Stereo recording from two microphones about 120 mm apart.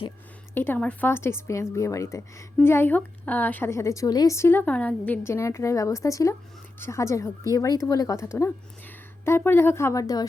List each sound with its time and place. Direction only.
0.5 s a woman's voice: 15° left (ahead or behind)